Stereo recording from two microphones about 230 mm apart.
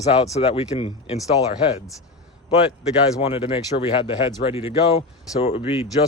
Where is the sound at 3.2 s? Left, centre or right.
Left.